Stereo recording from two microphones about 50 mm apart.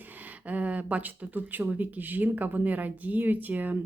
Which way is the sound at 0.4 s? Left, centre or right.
Right.